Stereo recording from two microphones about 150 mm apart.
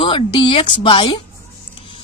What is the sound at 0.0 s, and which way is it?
Speech, 35° left (ahead or behind).